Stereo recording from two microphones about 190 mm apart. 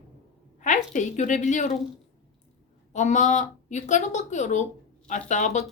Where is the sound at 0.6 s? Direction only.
40° left (ahead or behind).